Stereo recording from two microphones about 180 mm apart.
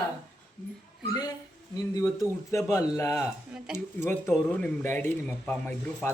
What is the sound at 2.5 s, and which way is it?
Speech, 15° left (ahead or behind).